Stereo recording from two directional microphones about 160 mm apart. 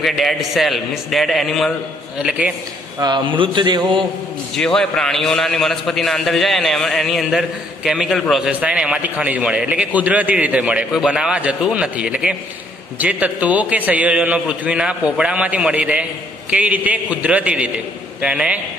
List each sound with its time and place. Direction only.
0.0 s a man's voice: centre (ahead or behind)
3.0 s a man's voice: 30° right (ahead or behind)
4.6 s a man's voice: 5° left (ahead or behind)